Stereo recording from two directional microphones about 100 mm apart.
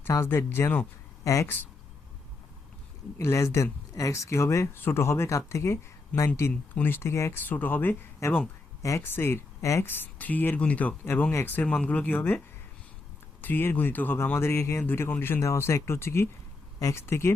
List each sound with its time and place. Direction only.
0.0 s speech: 25° left (ahead or behind)
3.2 s speech: 25° left (ahead or behind)
8.8 s speech: 30° left (ahead or behind)
13.4 s speech: 20° left (ahead or behind)